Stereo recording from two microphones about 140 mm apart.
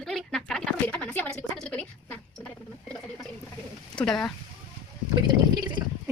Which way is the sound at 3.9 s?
5° left (ahead or behind).